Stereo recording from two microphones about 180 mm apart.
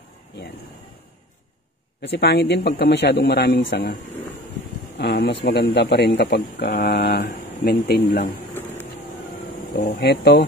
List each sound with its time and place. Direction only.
2.0 s speech: 70° left (ahead or behind)
4.9 s speech: 70° left (ahead or behind)
9.8 s speech: 65° left (ahead or behind)